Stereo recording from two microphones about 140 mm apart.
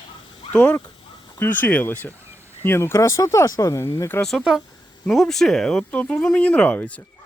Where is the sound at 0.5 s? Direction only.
10° left (ahead or behind).